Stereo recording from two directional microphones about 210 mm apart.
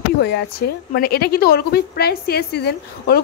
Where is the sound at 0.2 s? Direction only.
50° left (ahead or behind).